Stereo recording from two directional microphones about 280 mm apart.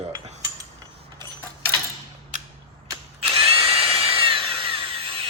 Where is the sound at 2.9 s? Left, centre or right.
Centre.